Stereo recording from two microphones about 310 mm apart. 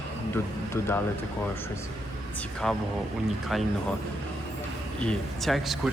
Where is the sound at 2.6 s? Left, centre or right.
Centre.